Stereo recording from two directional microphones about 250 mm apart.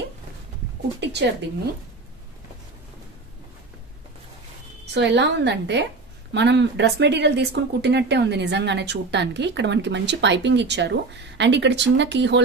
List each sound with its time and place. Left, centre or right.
1.0 s speech: right
4.9 s speech: right